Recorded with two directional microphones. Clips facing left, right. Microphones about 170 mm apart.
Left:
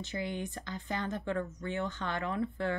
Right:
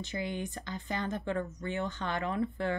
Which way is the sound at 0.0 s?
15° right (ahead or behind).